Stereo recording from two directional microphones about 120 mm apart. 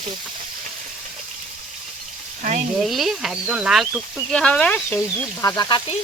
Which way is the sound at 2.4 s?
90° right.